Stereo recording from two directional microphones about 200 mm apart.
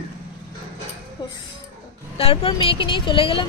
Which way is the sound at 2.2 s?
25° left (ahead or behind).